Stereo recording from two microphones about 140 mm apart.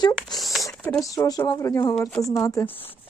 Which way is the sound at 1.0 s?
25° left (ahead or behind).